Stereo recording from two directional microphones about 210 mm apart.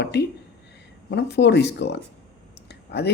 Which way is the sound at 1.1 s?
55° left (ahead or behind).